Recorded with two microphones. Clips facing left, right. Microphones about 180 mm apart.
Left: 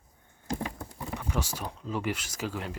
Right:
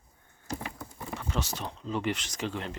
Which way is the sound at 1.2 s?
10° left (ahead or behind).